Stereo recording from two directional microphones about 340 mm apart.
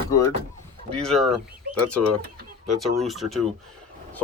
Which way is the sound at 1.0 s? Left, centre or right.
Centre.